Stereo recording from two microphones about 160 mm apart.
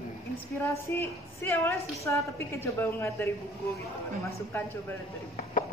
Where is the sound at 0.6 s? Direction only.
15° left (ahead or behind).